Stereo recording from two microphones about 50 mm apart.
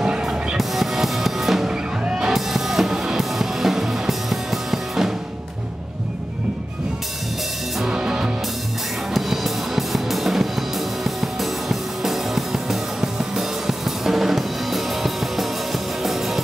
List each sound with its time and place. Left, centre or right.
0.0 s music: centre
0.6 s drum kit: centre
1.7 s music: centre
2.3 s music: centre
7.8 s music: centre
9.1 s music: centre